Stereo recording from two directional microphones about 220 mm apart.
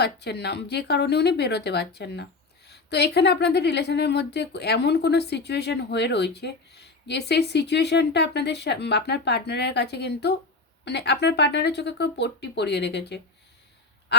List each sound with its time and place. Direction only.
0.0 s speech: 50° left (ahead or behind)